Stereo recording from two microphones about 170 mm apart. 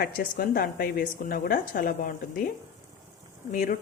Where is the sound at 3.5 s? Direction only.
50° left (ahead or behind).